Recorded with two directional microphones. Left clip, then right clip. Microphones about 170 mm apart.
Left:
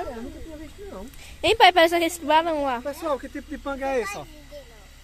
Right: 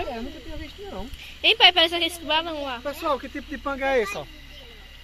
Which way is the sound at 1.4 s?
40° left (ahead or behind).